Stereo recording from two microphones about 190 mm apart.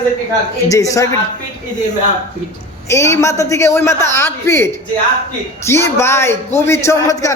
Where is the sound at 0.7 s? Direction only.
15° left (ahead or behind).